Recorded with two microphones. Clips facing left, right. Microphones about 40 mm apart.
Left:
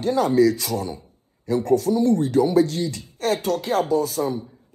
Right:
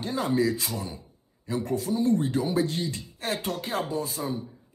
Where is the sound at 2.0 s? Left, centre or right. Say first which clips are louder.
Left 4 dB; right.